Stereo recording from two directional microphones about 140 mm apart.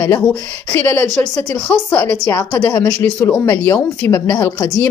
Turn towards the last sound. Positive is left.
turn(degrees=20)  # may be behind; listen again after turning